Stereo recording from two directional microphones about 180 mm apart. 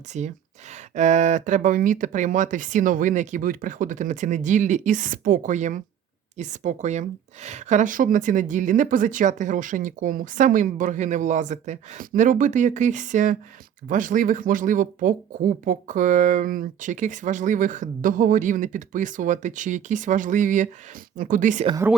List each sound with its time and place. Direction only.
0.1 s speech: 40° right (ahead or behind)